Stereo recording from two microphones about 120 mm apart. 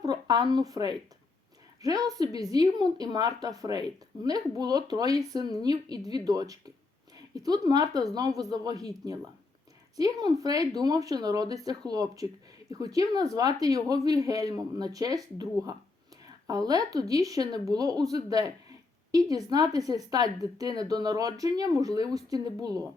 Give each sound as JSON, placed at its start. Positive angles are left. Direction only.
{"t": 0.0, "sound": "a woman's voice", "side_deg": -35}